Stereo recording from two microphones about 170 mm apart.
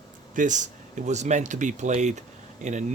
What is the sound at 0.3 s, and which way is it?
Speech, 45° right (ahead or behind).